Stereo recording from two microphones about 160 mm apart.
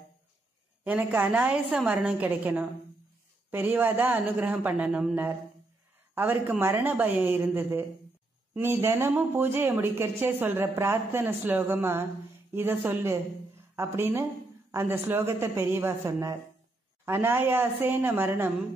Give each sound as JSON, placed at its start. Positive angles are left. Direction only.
{"t": 0.8, "sound": "speech", "side_deg": -10}